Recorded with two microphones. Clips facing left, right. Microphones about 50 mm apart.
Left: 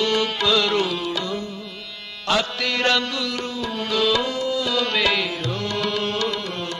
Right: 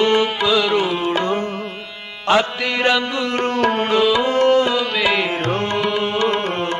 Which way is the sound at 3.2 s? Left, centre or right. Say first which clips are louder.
Right 7 dB; right.